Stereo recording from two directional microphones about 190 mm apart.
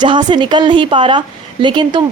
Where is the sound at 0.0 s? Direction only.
25° right (ahead or behind).